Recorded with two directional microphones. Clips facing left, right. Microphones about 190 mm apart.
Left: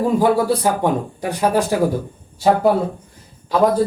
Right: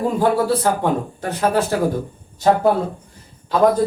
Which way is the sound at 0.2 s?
15° left (ahead or behind).